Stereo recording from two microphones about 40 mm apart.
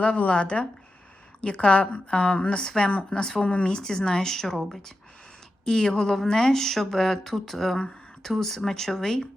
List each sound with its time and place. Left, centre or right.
0.2 s speech: left; by 9.2 s centre